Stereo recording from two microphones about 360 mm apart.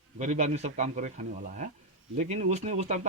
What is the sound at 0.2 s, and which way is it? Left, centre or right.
Speech, centre.